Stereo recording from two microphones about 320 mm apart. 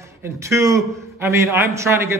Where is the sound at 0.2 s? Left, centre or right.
Centre.